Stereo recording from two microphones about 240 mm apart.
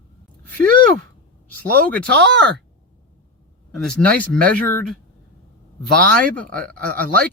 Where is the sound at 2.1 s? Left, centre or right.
Right.